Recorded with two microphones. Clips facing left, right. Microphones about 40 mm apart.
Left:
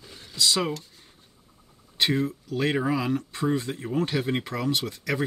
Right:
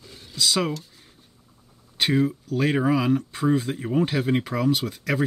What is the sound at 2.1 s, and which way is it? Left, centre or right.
Speech, centre.